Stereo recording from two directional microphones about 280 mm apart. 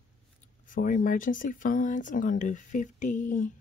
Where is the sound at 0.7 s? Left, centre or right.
Left.